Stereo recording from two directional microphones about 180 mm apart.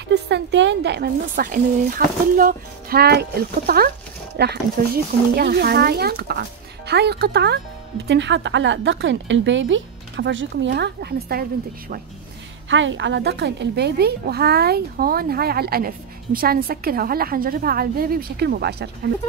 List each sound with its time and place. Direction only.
0.1 s a woman's voice: 75° right (ahead or behind)
8.1 s a woman's voice: 80° right; by 11.4 s 60° right (ahead or behind)
12.6 s a woman's voice: 90° right; by 19.1 s 65° right (ahead or behind)